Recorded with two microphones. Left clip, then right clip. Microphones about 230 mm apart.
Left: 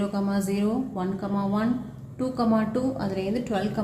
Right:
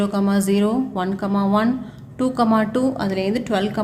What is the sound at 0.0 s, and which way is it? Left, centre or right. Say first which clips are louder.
A woman's voice: right 7 dB; right.